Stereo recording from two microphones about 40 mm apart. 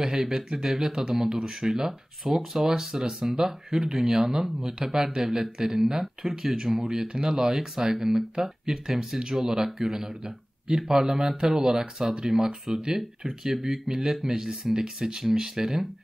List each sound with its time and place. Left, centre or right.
0.0 s speech: centre